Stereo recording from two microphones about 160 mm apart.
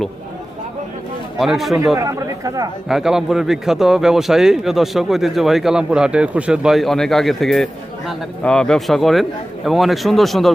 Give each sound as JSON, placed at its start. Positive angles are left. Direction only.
{"t": 1.4, "sound": "a man's voice", "side_deg": 0}
{"t": 2.0, "sound": "speech", "side_deg": -20}
{"t": 2.9, "sound": "a man's voice", "side_deg": -5}